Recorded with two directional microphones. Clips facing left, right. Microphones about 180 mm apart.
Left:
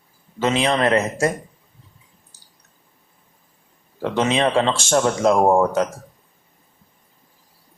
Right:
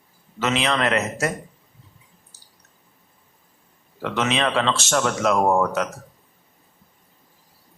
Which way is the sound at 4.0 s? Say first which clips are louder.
Left 4 dB; 30° left (ahead or behind).